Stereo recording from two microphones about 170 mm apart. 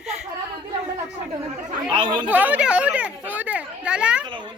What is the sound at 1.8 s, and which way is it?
Speech, 30° right (ahead or behind).